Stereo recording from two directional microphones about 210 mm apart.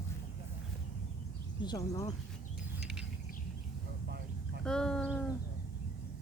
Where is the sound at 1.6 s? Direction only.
20° left (ahead or behind).